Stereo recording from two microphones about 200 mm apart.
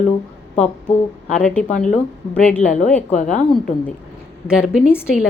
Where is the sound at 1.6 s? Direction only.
35° left (ahead or behind).